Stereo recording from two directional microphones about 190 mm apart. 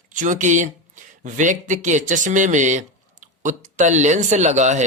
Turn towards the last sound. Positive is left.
turn(degrees=-40)  # may be behind; listen again after turning